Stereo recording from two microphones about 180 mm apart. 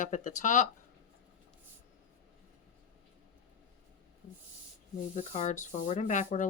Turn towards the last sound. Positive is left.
turn(degrees=45)  # may be behind; listen again after turning